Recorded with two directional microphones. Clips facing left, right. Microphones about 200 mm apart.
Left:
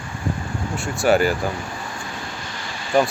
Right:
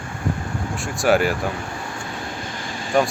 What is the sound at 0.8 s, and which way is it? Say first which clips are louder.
Speech: left 1 dB; centre (ahead or behind).